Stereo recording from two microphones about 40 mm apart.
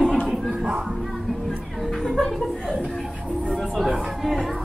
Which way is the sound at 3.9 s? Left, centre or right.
Centre.